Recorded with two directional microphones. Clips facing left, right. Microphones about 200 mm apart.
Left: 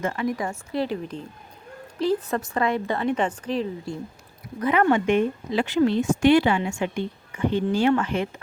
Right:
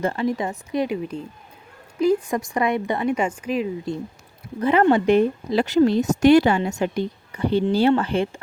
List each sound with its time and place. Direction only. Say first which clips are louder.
0.0 s a woman's voice: right 3 dB; 30° right (ahead or behind); by 3.7 s 10° right (ahead or behind)
4.6 s speech: right 3 dB; 30° right (ahead or behind)